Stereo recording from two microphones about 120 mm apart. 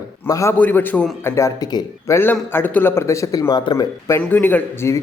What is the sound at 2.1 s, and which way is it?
Speech, 15° left (ahead or behind).